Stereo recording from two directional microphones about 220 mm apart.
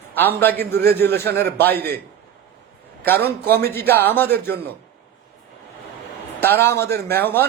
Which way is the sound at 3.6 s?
10° left (ahead or behind).